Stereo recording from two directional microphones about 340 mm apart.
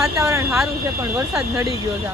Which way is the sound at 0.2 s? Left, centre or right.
Centre.